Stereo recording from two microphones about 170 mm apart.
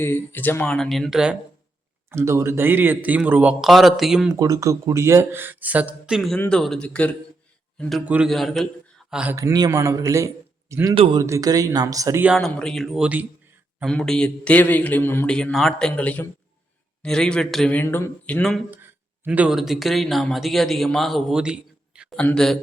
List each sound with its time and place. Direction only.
0.0 s speech: 10° left (ahead or behind); by 1.4 s 5° right (ahead or behind)
2.0 s a man's voice: 15° right (ahead or behind)
4.3 s a man's voice: 20° right (ahead or behind)
9.3 s a man's voice: 20° right (ahead or behind)
10.9 s speech: 30° right (ahead or behind)
11.2 s speech: 20° right (ahead or behind)
12.2 s a man's voice: centre (ahead or behind)
19.2 s speech: 10° right (ahead or behind)
22.2 s speech: 5° left (ahead or behind)